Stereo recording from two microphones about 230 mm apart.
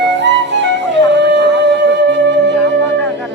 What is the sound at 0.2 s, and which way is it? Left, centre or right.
Flute, right.